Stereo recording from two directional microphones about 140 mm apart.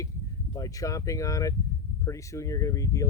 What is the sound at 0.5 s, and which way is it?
Speech, 25° left (ahead or behind).